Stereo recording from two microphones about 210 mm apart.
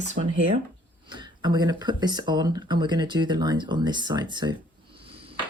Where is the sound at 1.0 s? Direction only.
20° right (ahead or behind).